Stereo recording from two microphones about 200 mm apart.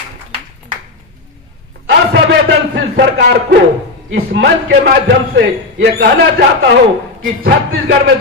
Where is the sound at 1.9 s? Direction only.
65° right (ahead or behind).